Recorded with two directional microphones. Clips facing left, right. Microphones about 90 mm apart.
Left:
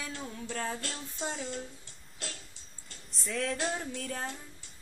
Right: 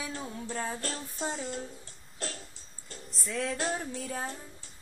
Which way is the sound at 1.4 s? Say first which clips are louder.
Right 2 dB; 40° right (ahead or behind).